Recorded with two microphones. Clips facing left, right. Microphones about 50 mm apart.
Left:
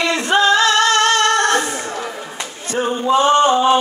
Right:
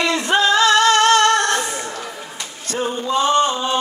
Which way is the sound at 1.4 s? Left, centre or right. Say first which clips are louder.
Left 3 dB; left.